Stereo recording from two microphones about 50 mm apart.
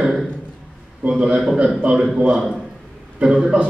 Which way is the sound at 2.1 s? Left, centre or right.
Centre.